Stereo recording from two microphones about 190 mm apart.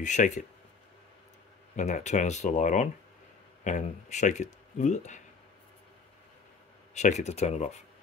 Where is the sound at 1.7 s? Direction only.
40° left (ahead or behind).